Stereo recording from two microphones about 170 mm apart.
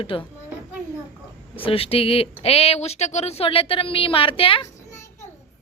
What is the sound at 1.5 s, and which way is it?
A woman's voice, 35° left (ahead or behind).